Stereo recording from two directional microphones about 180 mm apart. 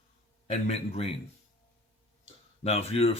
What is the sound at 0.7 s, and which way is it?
Speech, 35° left (ahead or behind).